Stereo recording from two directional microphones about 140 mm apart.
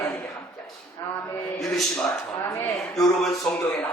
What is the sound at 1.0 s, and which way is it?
Speech, 25° left (ahead or behind).